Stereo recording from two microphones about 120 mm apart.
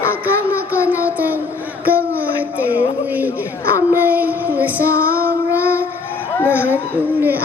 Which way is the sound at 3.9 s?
15° right (ahead or behind).